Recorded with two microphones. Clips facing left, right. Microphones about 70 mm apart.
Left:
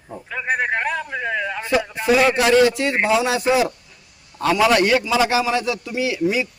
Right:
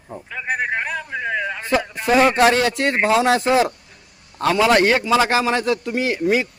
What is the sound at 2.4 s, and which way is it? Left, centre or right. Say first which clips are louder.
A man's voice: left 1 dB; right.